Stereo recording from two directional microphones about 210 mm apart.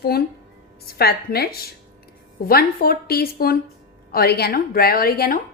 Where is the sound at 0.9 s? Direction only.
50° left (ahead or behind).